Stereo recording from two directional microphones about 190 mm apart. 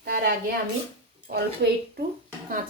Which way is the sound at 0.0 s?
55° right (ahead or behind).